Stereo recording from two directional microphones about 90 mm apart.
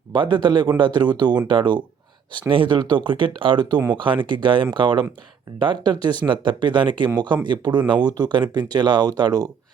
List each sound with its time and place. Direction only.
0.1 s speech: 60° right (ahead or behind)